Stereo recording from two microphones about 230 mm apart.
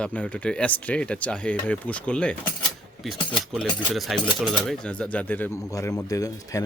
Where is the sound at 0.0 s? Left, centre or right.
Centre.